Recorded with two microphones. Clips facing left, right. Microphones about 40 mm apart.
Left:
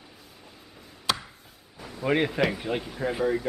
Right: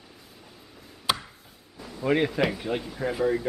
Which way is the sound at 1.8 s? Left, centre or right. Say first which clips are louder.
Right 1 dB; centre.